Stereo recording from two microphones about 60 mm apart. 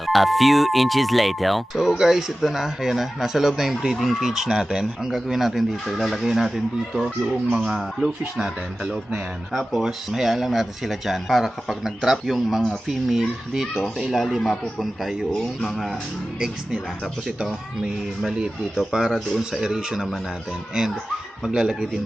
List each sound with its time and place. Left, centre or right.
0.0 s speech: centre
7.7 s speech: centre
8.8 s speech: centre
9.5 s speech: centre
17.2 s speech: centre
21.4 s speech: centre